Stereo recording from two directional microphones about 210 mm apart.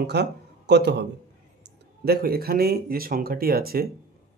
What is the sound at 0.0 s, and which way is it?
A man's voice, 50° right (ahead or behind).